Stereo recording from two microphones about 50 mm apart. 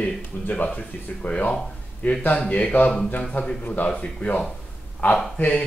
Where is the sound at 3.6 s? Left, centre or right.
Left.